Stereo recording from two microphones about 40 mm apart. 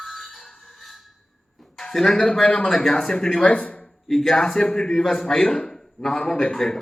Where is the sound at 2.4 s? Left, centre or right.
Left.